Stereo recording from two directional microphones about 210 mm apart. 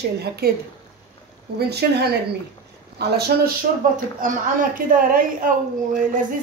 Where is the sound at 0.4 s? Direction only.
50° right (ahead or behind).